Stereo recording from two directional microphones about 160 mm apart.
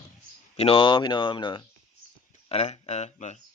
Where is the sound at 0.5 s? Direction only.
35° left (ahead or behind).